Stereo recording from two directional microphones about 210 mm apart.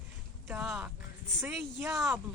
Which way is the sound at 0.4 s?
5° right (ahead or behind).